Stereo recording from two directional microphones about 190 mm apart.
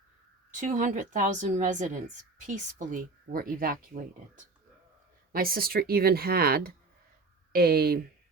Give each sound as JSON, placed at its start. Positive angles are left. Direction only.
{"t": 0.6, "sound": "a woman's voice", "side_deg": -40}
{"t": 5.3, "sound": "speech", "side_deg": -50}